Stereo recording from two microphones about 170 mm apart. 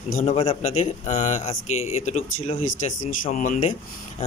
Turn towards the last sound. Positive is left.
turn(degrees=45)  # may be behind; listen again after turning